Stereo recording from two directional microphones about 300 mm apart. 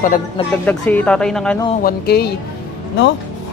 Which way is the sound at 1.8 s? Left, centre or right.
Left.